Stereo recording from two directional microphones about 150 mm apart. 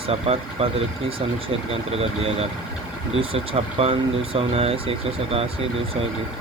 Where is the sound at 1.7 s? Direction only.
40° right (ahead or behind).